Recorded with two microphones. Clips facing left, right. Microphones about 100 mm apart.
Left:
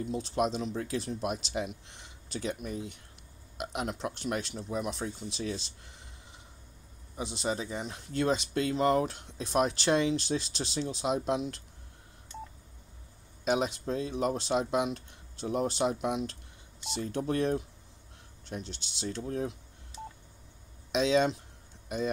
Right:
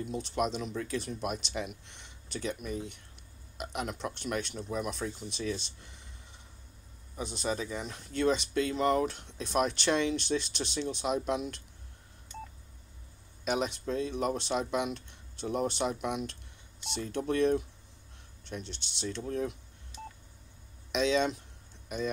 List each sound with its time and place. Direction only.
0.0 s speech: 35° left (ahead or behind)
7.2 s speech: 25° left (ahead or behind)
13.5 s speech: 35° left (ahead or behind)